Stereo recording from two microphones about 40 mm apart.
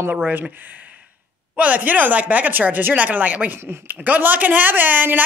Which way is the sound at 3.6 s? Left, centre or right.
Right.